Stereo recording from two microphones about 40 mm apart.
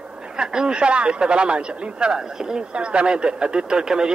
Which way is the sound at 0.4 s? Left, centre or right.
Centre.